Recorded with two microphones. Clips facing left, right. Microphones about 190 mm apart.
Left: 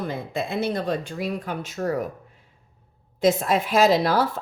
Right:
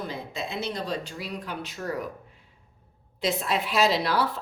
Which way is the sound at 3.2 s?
45° left (ahead or behind).